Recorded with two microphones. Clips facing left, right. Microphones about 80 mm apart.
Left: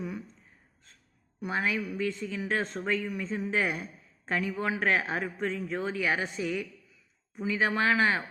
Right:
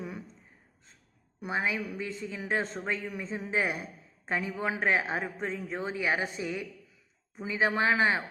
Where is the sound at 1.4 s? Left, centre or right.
Right.